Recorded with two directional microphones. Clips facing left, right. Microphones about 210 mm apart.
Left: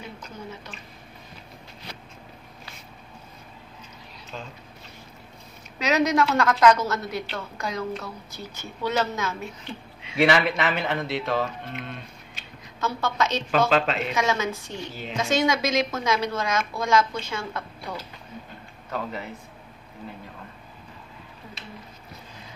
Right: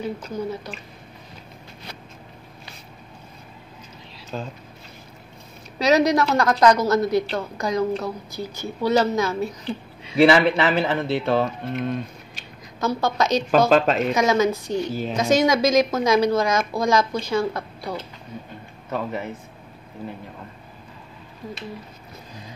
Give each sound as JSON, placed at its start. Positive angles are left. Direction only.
{"t": 0.2, "sound": "speech", "side_deg": -35}
{"t": 4.3, "sound": "speech", "side_deg": -40}
{"t": 5.8, "sound": "speech", "side_deg": -35}